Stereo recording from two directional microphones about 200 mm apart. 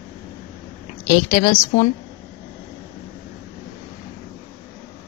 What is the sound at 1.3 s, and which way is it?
Speech, 35° left (ahead or behind).